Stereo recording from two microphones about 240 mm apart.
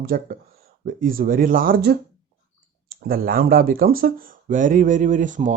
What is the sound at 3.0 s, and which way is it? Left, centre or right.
Speech, right.